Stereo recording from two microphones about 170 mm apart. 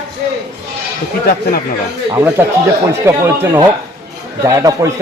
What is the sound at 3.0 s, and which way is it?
A man's voice, 15° right (ahead or behind).